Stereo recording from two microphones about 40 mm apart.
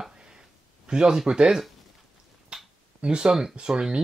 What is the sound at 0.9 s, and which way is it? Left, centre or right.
Speech, right.